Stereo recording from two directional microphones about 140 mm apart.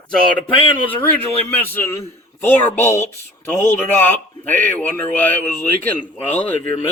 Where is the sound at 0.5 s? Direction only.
40° left (ahead or behind).